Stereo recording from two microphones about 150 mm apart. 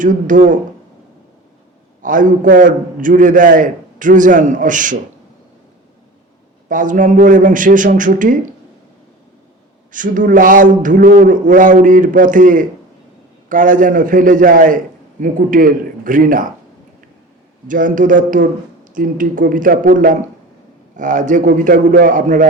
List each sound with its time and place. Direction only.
0.0 s a man's voice: 60° right (ahead or behind)
2.0 s a man's voice: 60° right (ahead or behind)
6.7 s a man's voice: 60° right (ahead or behind)
9.9 s a man's voice: 60° right (ahead or behind)
17.7 s a man's voice: 60° right (ahead or behind)